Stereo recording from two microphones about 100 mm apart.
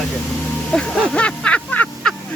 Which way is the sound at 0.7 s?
10° left (ahead or behind).